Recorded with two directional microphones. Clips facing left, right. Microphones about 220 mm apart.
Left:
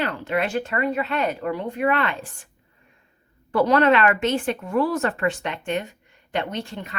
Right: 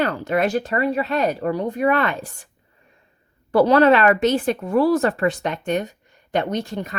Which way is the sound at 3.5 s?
35° right (ahead or behind).